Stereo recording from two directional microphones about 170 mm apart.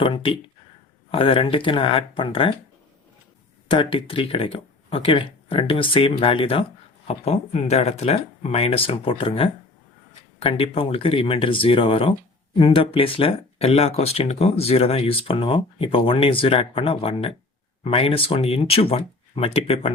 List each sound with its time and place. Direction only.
0.0 s speech: 30° left (ahead or behind)
3.7 s speech: 30° left (ahead or behind)